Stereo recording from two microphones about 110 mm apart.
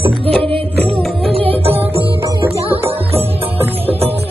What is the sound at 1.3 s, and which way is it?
Music, 60° right (ahead or behind).